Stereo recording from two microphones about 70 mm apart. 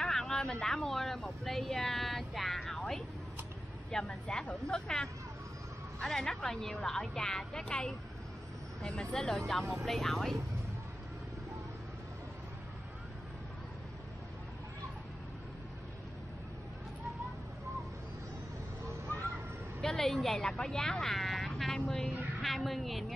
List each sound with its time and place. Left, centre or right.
0.0 s a woman's voice: centre
19.8 s speech: centre